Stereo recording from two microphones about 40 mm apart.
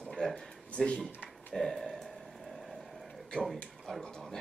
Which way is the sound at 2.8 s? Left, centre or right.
Centre.